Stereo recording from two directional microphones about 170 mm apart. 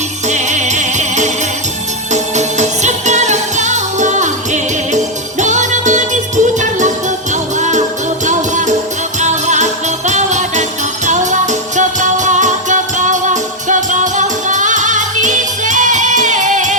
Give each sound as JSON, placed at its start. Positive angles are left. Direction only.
{"t": 0.3, "sound": "music", "side_deg": -45}